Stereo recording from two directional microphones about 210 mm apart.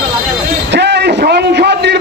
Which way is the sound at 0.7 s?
55° right (ahead or behind).